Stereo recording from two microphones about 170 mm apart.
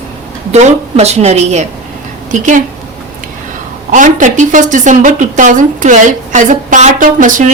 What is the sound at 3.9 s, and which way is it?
A woman's voice, 50° right (ahead or behind).